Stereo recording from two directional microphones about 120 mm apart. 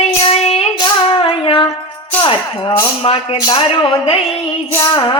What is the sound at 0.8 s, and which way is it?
Speech, 45° left (ahead or behind).